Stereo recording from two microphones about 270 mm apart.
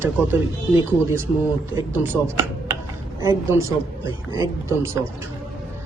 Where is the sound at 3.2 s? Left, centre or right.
Centre.